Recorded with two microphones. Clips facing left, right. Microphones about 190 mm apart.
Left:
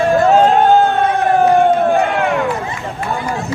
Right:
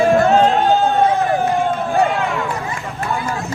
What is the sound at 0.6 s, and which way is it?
Run, 55° left (ahead or behind).